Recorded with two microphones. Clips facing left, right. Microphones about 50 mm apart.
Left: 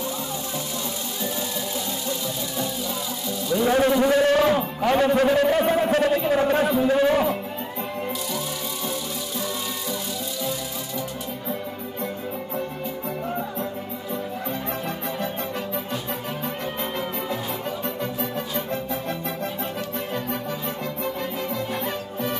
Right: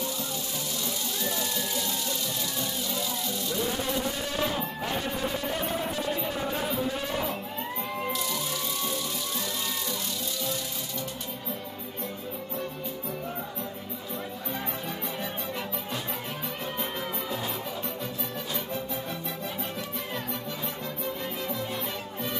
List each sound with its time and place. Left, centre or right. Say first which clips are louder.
3.6 s a sound: left 14 dB; left
4.8 s a man's voice: left 15 dB; left
21.8 s music: left 6 dB; left